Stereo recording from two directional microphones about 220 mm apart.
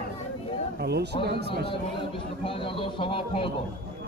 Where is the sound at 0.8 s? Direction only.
50° right (ahead or behind).